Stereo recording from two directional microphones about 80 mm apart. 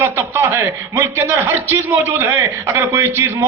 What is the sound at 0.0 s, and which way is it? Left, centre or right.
A man's voice, right.